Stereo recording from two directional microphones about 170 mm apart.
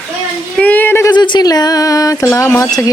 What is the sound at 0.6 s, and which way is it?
Speech, 10° left (ahead or behind).